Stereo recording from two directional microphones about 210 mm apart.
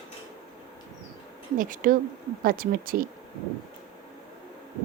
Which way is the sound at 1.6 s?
40° right (ahead or behind).